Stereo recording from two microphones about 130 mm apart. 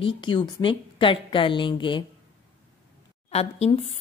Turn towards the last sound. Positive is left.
turn(degrees=55)  # may be behind; listen again after turning